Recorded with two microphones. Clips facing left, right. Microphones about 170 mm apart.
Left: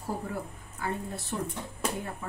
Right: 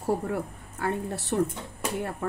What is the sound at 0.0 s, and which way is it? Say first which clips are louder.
Speech: right 7 dB; 65° right (ahead or behind).